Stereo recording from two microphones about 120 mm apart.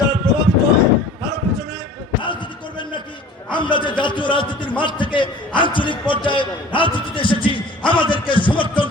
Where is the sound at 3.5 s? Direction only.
40° left (ahead or behind).